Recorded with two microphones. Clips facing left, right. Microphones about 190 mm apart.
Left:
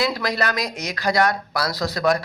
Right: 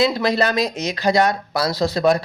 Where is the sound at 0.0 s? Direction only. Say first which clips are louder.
Right 5 dB; 25° right (ahead or behind).